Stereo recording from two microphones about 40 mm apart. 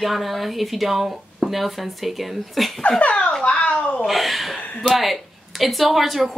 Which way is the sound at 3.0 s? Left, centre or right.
Left.